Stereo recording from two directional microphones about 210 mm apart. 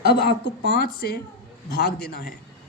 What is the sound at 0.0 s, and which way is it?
A woman's voice, 50° left (ahead or behind).